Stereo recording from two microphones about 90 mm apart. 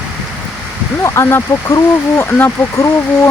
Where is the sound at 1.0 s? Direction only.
30° left (ahead or behind).